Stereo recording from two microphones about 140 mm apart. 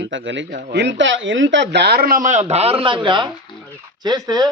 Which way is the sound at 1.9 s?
90° right.